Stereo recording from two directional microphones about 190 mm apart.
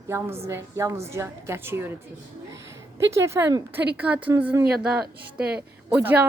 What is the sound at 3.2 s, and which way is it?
Speech, 15° right (ahead or behind).